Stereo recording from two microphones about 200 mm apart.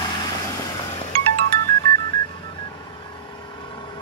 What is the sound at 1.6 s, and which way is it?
Telephone dialing, 20° left (ahead or behind).